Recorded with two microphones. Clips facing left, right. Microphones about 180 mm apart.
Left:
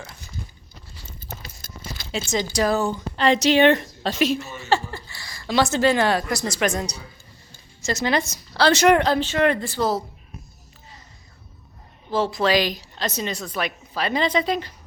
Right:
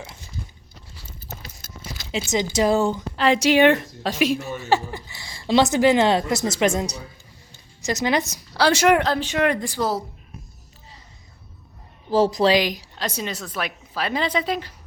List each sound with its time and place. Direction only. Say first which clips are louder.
0.0 s speech: right 1 dB; 25° right (ahead or behind)
1.6 s a sound: left 1 dB; centre (ahead or behind)
2.1 s speech: right 2 dB; 20° right (ahead or behind)
3.2 s a woman's voice: even; 10° right (ahead or behind)
12.1 s a woman's voice: right 4 dB; 40° right (ahead or behind)
12.5 s a woman's voice: right 1 dB; 15° right (ahead or behind)